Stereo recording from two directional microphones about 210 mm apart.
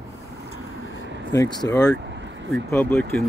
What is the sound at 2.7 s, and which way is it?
Speech, 10° left (ahead or behind).